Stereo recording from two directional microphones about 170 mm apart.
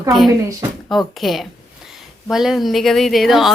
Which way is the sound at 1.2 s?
Centre (ahead or behind).